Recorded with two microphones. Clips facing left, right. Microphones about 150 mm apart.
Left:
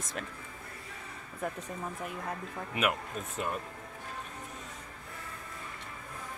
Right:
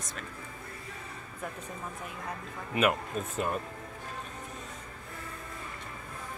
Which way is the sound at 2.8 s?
30° right (ahead or behind).